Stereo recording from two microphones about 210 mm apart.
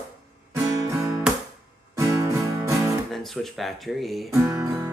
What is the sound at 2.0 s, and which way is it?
Music, 15° right (ahead or behind).